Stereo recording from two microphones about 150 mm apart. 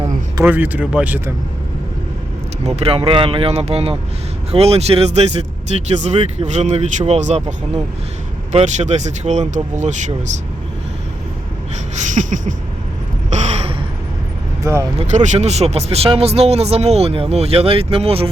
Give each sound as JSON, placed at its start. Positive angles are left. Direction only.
{"t": 0.4, "sound": "speech", "side_deg": -10}
{"t": 2.6, "sound": "speech", "side_deg": -40}
{"t": 8.5, "sound": "speech", "side_deg": -50}
{"t": 12.1, "sound": "a sound", "side_deg": -60}
{"t": 13.3, "sound": "gasp", "side_deg": -50}
{"t": 14.6, "sound": "speech", "side_deg": -20}
{"t": 14.9, "sound": "speech", "side_deg": -55}